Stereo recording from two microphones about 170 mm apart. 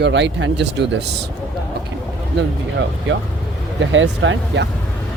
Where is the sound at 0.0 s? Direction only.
90° right.